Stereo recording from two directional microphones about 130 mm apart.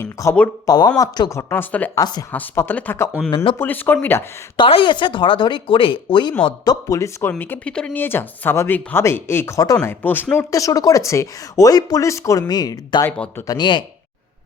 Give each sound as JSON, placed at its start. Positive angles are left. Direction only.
{"t": 0.0, "sound": "speech", "side_deg": 20}
{"t": 1.4, "sound": "speech", "side_deg": 15}
{"t": 2.0, "sound": "speech", "side_deg": 30}
{"t": 2.3, "sound": "speech", "side_deg": 15}
{"t": 3.2, "sound": "speech", "side_deg": 45}
{"t": 3.6, "sound": "speech", "side_deg": 15}
{"t": 4.5, "sound": "speech", "side_deg": 40}
{"t": 10.5, "sound": "speech", "side_deg": 25}
{"t": 13.1, "sound": "speech", "side_deg": 10}
{"t": 13.5, "sound": "speech", "side_deg": 35}